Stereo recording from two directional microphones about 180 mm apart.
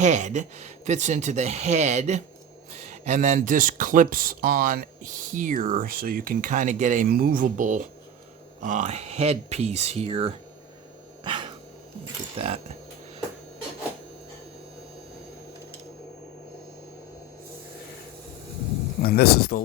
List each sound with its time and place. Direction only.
0.0 s speech: 40° right (ahead or behind)
11.2 s dog: 25° right (ahead or behind)
12.4 s speech: 30° right (ahead or behind)
19.0 s speech: 60° left (ahead or behind)